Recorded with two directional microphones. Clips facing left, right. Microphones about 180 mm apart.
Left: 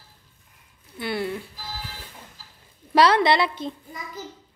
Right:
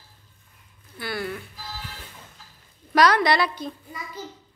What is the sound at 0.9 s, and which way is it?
Speech, 25° left (ahead or behind).